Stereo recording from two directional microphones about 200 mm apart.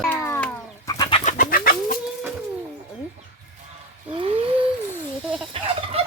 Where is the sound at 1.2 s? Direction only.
40° left (ahead or behind).